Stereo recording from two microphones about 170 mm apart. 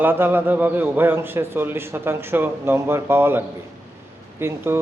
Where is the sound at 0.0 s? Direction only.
10° right (ahead or behind).